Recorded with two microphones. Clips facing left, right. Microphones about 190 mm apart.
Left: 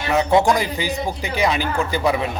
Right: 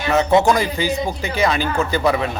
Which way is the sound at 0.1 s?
15° left (ahead or behind).